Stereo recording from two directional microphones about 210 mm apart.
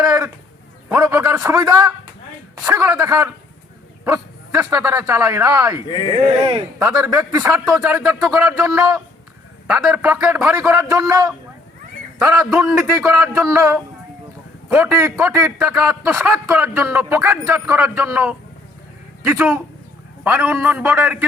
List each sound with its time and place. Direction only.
0.9 s a sound: 5° right (ahead or behind)
1.4 s a man's voice: 15° right (ahead or behind)
5.7 s speech: 20° left (ahead or behind)
6.8 s a man's voice: 15° right (ahead or behind)
12.2 s a man's voice: 5° right (ahead or behind)